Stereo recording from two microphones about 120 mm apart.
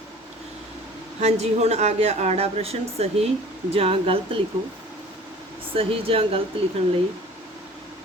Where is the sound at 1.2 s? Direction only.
65° right (ahead or behind).